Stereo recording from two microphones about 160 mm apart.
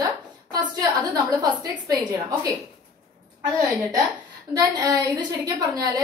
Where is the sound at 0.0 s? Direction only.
25° right (ahead or behind).